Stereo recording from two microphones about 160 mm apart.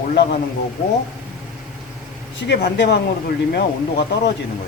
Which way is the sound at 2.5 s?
90° left.